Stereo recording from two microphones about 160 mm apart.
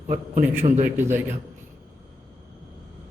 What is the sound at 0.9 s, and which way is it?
Speech, 10° right (ahead or behind).